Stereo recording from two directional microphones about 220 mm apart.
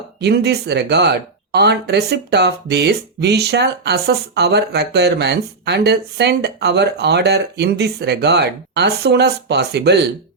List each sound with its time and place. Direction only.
0.2 s speech: 50° right (ahead or behind)